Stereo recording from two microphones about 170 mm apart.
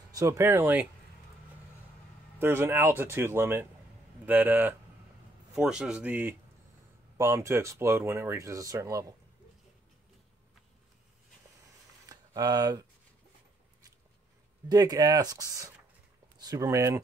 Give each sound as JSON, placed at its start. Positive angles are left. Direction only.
{"t": 0.1, "sound": "speech", "side_deg": -20}
{"t": 2.3, "sound": "speech", "side_deg": -15}
{"t": 12.1, "sound": "speech", "side_deg": -20}
{"t": 14.7, "sound": "speech", "side_deg": -20}